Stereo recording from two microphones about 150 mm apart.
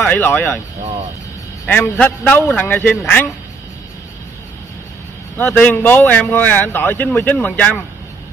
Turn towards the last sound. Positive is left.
turn(degrees=10)  # may be behind; listen again after turning